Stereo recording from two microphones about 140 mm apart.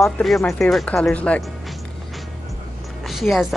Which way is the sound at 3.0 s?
Centre (ahead or behind).